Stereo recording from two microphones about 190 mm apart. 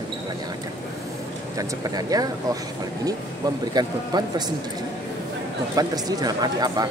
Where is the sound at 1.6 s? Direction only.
20° right (ahead or behind).